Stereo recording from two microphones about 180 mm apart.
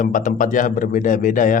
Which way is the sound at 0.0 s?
50° left (ahead or behind).